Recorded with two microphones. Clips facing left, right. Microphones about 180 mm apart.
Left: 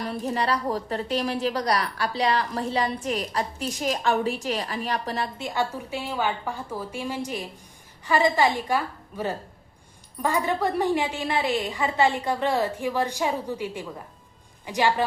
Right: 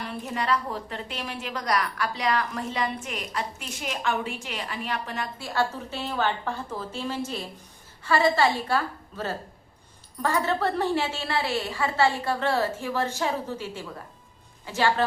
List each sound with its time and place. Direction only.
0.0 s a woman's voice: 35° left (ahead or behind)
5.4 s a woman's voice: 15° left (ahead or behind)